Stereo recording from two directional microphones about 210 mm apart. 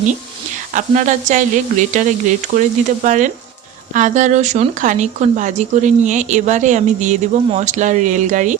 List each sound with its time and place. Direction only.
0.7 s speech: 35° right (ahead or behind)